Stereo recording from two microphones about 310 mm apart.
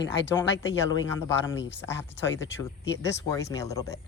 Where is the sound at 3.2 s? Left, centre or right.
Centre.